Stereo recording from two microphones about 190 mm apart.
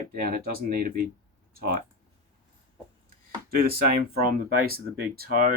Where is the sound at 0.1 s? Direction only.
50° right (ahead or behind).